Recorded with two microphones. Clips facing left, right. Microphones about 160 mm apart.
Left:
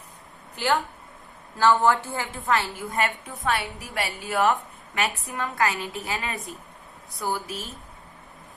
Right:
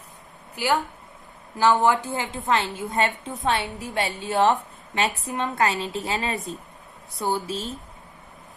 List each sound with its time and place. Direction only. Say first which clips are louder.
0.5 s a woman's voice: right 1 dB; 10° right (ahead or behind); by 7.7 s 25° right (ahead or behind)